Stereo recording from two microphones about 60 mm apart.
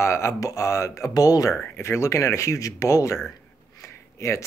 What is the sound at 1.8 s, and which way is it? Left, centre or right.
Speech, left.